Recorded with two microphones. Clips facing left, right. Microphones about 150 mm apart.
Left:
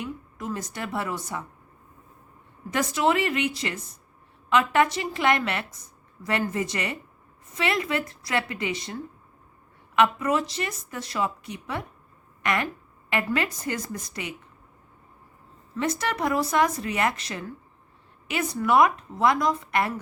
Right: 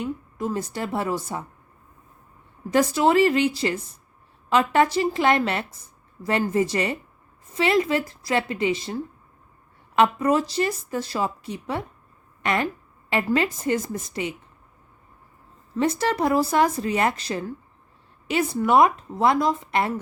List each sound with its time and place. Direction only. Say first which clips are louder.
0.0 s a woman's voice: right 6 dB; 30° right (ahead or behind)
2.6 s a woman's voice: right 4 dB; 35° right (ahead or behind)
15.7 s a woman's voice: right 5 dB; 30° right (ahead or behind)